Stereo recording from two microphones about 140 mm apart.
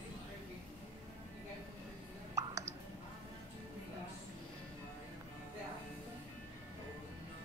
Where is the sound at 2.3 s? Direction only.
25° right (ahead or behind).